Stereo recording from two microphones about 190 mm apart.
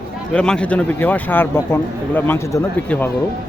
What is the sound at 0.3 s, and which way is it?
Speech, 5° left (ahead or behind).